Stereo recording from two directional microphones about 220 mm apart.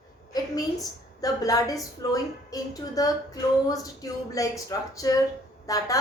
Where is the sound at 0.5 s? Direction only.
15° left (ahead or behind).